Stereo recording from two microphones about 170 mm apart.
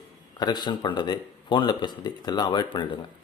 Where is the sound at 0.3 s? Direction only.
25° left (ahead or behind).